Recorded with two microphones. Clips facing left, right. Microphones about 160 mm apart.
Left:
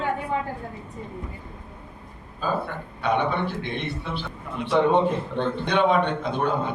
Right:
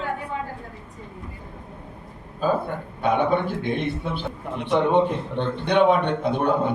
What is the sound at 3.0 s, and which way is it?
A man's voice, 50° right (ahead or behind).